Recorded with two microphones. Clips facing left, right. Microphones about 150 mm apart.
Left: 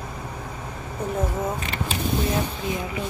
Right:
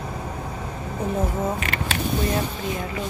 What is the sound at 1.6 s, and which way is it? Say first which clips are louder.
Speech: right 2 dB; 75° right (ahead or behind).